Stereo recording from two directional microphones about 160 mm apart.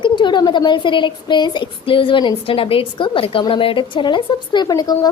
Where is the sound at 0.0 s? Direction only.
30° left (ahead or behind).